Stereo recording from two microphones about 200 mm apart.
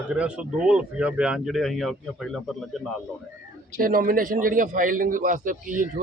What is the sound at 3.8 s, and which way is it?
Speech, 45° right (ahead or behind).